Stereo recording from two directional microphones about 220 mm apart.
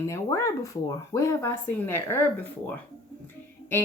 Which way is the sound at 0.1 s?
15° left (ahead or behind).